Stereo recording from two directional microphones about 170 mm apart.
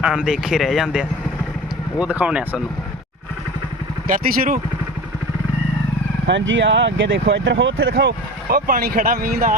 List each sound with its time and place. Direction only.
0.0 s speech: 5° right (ahead or behind)
4.1 s speech: 55° right (ahead or behind)
6.2 s speech: 90° right; by 9.6 s 60° right (ahead or behind)